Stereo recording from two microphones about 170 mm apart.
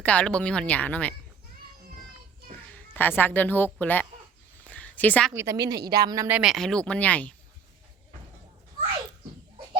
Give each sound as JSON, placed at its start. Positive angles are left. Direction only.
{"t": 0.0, "sound": "speech", "side_deg": 5}
{"t": 2.9, "sound": "speech", "side_deg": 10}
{"t": 4.6, "sound": "a sound", "side_deg": 10}
{"t": 5.3, "sound": "a woman's voice", "side_deg": -15}
{"t": 6.3, "sound": "speech", "side_deg": 0}